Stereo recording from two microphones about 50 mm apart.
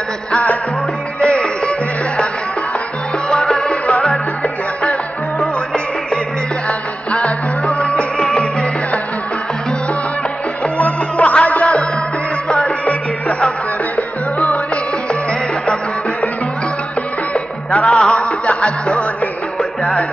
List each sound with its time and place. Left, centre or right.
0.3 s music: left
3.3 s music: centre
3.8 s music: left
7.1 s music: left
10.8 s music: left
15.6 s music: left
17.3 s music: left